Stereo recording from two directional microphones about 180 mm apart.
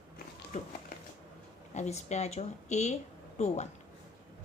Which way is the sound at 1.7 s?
40° left (ahead or behind).